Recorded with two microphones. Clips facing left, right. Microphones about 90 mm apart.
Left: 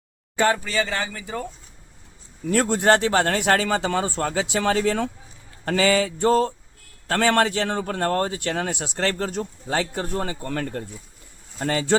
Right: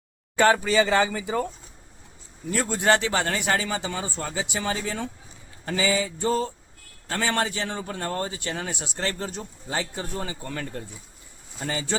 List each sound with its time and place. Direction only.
0.4 s speech: 5° right (ahead or behind)
0.7 s speech: 20° right (ahead or behind)
1.2 s speech: 5° right (ahead or behind)
2.5 s a man's voice: 65° left (ahead or behind)
2.7 s speech: 40° left (ahead or behind)
3.3 s a man's voice: 70° left (ahead or behind)
10.2 s a man's voice: 50° left (ahead or behind)